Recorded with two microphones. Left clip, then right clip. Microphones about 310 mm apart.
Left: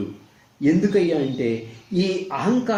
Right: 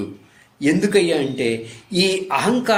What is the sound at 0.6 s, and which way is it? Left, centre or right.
A man's voice, right.